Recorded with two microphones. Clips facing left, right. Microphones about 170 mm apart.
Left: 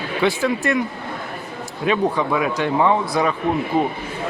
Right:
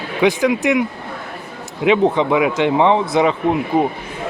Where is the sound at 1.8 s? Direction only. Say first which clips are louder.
Right 5 dB; 20° right (ahead or behind).